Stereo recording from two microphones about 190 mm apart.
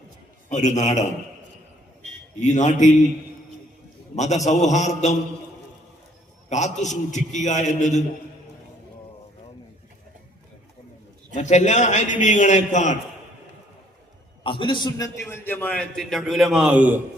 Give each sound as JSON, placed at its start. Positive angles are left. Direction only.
{"t": 0.4, "sound": "a man's voice", "side_deg": 40}
{"t": 2.4, "sound": "a man's voice", "side_deg": 40}
{"t": 4.1, "sound": "a man's voice", "side_deg": 40}
{"t": 6.5, "sound": "a man's voice", "side_deg": 40}
{"t": 11.3, "sound": "a man's voice", "side_deg": 40}
{"t": 14.4, "sound": "a man's voice", "side_deg": 25}